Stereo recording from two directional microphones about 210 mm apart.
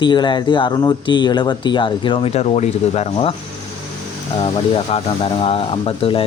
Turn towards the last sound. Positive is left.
turn(degrees=25)  # may be behind; listen again after turning